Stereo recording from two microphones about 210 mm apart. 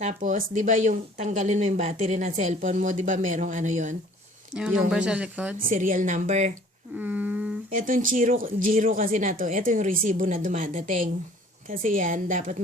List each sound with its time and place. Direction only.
0.0 s a woman's voice: 35° right (ahead or behind)
4.5 s speech: 5° right (ahead or behind)
5.6 s a woman's voice: 40° right (ahead or behind)
6.9 s a sound: 5° right (ahead or behind)
7.8 s a woman's voice: 40° right (ahead or behind)